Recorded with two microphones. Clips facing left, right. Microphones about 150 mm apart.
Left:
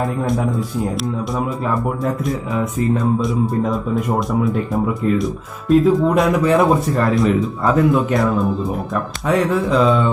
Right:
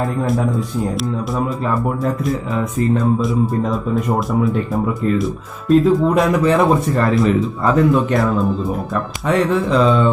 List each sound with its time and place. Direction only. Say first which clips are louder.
0.0 s speech: right 1 dB; centre (ahead or behind)